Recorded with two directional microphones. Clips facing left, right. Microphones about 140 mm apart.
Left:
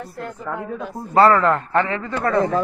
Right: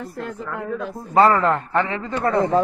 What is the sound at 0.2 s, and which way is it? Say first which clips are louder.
Speech: left 1 dB; 90° right.